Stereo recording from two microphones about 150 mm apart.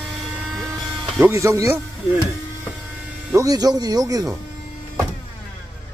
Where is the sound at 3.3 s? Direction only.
25° right (ahead or behind).